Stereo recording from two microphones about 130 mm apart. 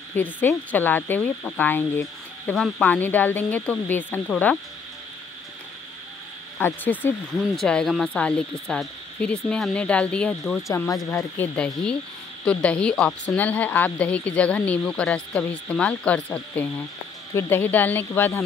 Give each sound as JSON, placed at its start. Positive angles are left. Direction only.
{"t": 0.1, "sound": "a woman's voice", "side_deg": 15}
{"t": 2.5, "sound": "a woman's voice", "side_deg": 5}
{"t": 6.6, "sound": "a woman's voice", "side_deg": 15}
{"t": 10.7, "sound": "a woman's voice", "side_deg": 25}